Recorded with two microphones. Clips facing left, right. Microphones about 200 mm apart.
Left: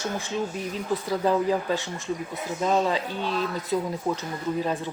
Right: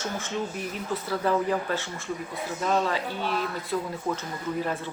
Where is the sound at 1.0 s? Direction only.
15° left (ahead or behind).